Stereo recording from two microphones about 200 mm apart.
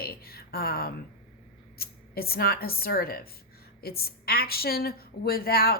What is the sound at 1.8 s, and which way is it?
A woman's voice, 50° left (ahead or behind).